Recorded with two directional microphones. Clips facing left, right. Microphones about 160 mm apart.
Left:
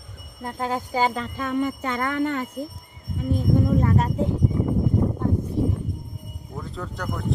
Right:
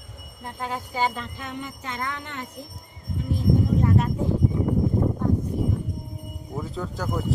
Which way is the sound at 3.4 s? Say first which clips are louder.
Left 1 dB; 50° left (ahead or behind).